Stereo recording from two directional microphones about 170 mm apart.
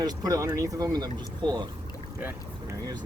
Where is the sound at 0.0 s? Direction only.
20° right (ahead or behind).